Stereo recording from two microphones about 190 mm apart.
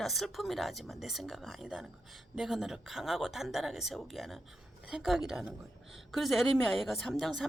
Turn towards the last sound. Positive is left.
turn(degrees=0)  # may be behind; listen again after turning